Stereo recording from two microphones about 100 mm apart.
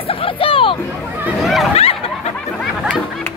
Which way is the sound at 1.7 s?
85° left.